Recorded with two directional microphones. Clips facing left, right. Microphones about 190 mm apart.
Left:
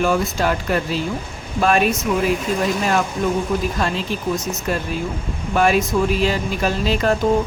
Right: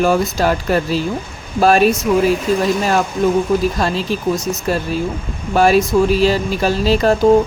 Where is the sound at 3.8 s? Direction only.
35° right (ahead or behind).